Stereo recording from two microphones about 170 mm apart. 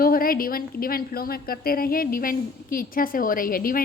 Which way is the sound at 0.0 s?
60° left (ahead or behind).